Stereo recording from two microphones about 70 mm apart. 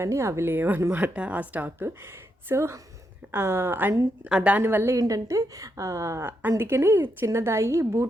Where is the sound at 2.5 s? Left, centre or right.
Right.